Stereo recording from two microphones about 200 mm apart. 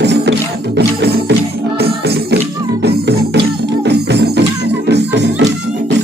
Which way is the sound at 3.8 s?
55° right (ahead or behind).